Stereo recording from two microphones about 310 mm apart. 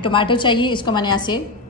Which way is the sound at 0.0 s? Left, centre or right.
Centre.